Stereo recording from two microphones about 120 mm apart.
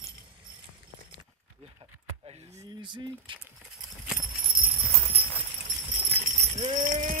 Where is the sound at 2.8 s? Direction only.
40° right (ahead or behind).